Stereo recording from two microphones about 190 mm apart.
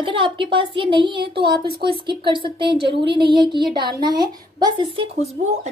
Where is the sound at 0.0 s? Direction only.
25° right (ahead or behind).